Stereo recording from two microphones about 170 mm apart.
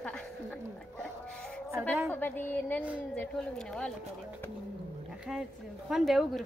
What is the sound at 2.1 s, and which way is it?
A woman's voice, 10° left (ahead or behind).